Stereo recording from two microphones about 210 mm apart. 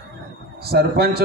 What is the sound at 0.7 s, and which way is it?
Speech, 50° right (ahead or behind).